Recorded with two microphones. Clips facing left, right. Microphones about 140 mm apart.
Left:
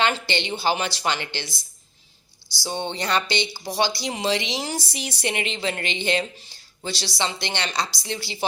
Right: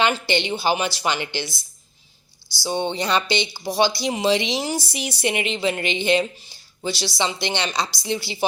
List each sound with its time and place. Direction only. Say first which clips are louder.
0.3 s speech: right 3 dB; 15° right (ahead or behind)
2.6 s speech: right 4 dB; 15° right (ahead or behind)